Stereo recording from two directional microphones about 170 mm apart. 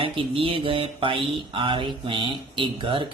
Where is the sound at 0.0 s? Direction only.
30° right (ahead or behind).